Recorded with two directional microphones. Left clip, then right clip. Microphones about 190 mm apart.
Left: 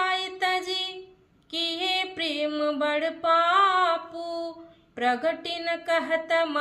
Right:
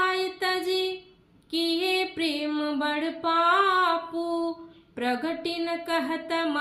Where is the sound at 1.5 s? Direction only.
20° left (ahead or behind).